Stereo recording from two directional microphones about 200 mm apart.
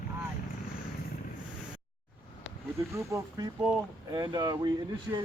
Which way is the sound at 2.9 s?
15° right (ahead or behind).